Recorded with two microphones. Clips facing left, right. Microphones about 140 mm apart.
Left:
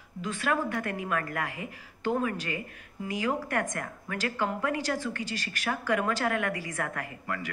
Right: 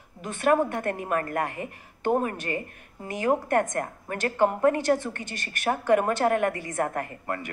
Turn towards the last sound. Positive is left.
turn(degrees=-45)  # may be behind; listen again after turning